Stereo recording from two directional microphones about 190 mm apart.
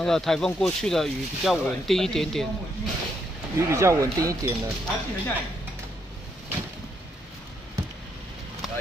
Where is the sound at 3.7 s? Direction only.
15° right (ahead or behind).